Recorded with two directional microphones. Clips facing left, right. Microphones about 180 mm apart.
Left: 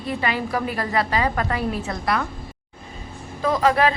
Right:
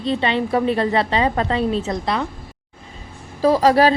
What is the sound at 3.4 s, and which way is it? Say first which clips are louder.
Speech: right 5 dB; 35° right (ahead or behind).